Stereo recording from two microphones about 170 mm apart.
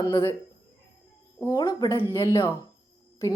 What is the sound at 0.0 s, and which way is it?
Speech, 25° left (ahead or behind).